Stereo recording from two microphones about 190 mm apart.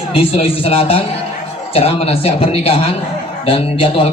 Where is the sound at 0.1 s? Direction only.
30° left (ahead or behind).